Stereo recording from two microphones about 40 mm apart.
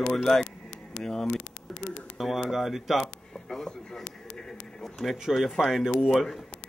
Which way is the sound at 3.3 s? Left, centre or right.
Centre.